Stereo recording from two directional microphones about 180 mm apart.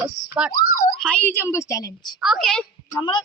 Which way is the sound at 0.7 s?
55° left (ahead or behind).